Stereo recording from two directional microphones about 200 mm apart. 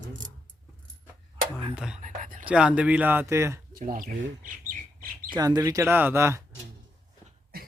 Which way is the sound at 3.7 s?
45° right (ahead or behind).